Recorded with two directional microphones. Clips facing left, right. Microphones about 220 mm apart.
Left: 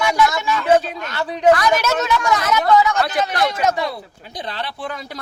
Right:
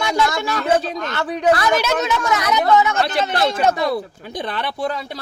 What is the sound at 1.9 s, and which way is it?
Speech, 20° right (ahead or behind).